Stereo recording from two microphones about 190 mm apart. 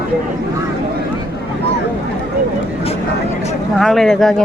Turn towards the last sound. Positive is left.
turn(degrees=0)  # may be behind; listen again after turning